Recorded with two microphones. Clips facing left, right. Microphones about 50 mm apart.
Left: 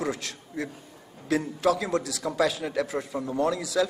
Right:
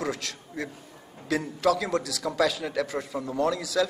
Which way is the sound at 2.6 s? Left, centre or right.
Centre.